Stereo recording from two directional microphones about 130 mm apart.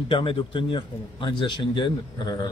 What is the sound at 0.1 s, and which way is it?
A man's voice, 45° left (ahead or behind).